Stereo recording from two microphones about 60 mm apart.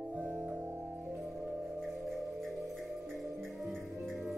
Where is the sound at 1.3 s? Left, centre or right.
Centre.